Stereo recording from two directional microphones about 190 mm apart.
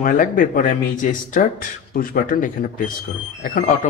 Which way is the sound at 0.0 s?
45° left (ahead or behind).